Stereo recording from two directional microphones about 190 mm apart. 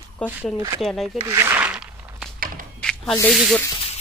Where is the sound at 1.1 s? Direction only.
20° right (ahead or behind).